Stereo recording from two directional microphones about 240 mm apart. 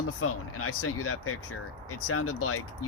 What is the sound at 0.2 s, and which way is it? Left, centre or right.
Speech, left.